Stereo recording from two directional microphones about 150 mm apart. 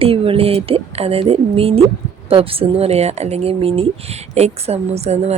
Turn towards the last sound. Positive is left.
turn(degrees=-45)  # may be behind; listen again after turning